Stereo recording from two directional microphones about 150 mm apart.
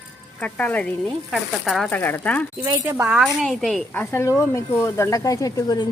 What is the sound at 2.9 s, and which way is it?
Speech, 5° right (ahead or behind).